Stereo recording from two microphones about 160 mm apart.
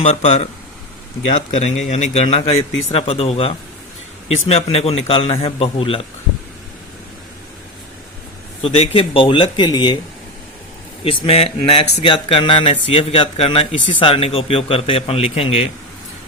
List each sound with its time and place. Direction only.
0.0 s speech: 40° left (ahead or behind)
1.5 s a man's voice: 45° left (ahead or behind)
8.6 s a man's voice: 35° left (ahead or behind)
11.0 s a man's voice: 40° left (ahead or behind)